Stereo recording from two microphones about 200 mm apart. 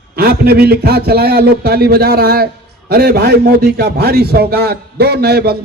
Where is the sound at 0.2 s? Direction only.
50° right (ahead or behind).